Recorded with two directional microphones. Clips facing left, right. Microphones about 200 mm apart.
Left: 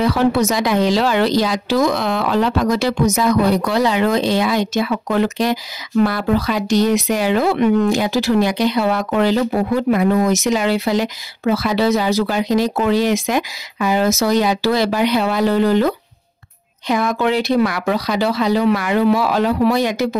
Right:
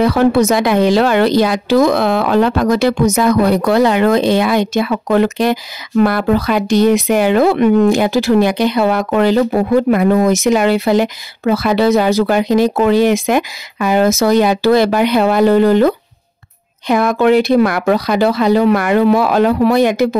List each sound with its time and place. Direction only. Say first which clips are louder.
0.0 s a woman's voice: right 4 dB; 55° right (ahead or behind)